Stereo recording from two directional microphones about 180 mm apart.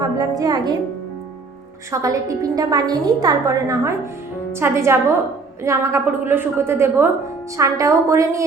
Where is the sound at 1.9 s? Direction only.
20° right (ahead or behind).